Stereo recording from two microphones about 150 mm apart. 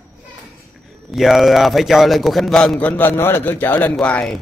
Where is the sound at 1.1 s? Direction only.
Centre (ahead or behind).